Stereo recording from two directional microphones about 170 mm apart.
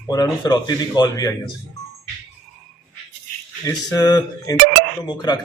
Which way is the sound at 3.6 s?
20° left (ahead or behind).